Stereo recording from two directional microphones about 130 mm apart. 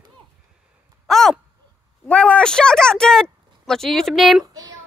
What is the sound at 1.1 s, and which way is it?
Speech, centre (ahead or behind).